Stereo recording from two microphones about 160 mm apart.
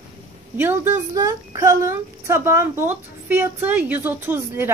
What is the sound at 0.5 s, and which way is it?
Speech, 15° right (ahead or behind).